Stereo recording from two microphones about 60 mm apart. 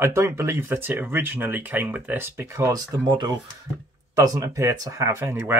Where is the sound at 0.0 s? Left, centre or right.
Right.